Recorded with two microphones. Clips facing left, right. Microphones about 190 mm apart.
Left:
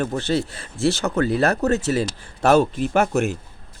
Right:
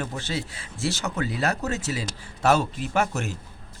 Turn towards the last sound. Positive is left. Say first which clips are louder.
# left 7 dB
turn(degrees=55)  # may be behind; listen again after turning